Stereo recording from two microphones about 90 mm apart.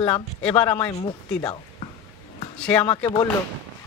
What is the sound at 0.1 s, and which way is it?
Speech, 15° left (ahead or behind).